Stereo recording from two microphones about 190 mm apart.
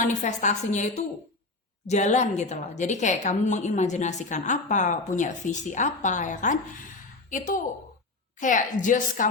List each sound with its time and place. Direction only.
0.0 s a woman's voice: 40° left (ahead or behind)